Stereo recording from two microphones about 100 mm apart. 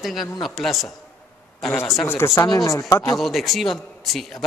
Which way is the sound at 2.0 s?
25° left (ahead or behind).